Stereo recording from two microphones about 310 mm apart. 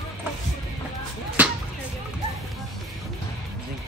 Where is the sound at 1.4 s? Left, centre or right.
Centre.